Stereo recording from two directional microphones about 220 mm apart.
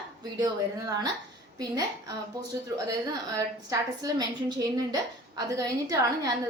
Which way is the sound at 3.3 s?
15° right (ahead or behind).